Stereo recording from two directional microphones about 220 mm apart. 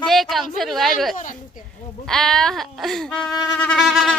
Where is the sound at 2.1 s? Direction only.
Centre (ahead or behind).